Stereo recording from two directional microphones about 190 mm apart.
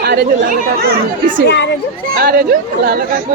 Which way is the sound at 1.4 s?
65° left (ahead or behind).